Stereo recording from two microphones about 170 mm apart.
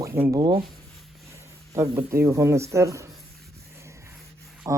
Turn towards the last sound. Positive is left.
turn(degrees=-15)  # may be behind; listen again after turning